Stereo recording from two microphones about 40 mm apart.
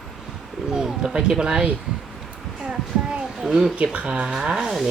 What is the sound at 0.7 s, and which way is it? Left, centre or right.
Bird, right.